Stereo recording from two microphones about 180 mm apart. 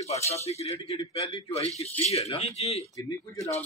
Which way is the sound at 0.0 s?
35° left (ahead or behind).